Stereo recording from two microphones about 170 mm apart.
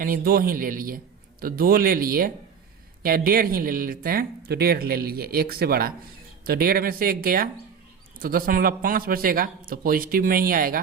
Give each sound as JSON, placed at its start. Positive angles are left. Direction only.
{"t": 0.0, "sound": "speech", "side_deg": -60}